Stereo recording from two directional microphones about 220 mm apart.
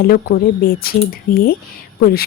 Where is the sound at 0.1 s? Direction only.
45° left (ahead or behind).